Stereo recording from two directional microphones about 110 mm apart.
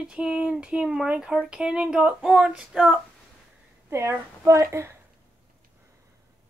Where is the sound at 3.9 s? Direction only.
25° right (ahead or behind).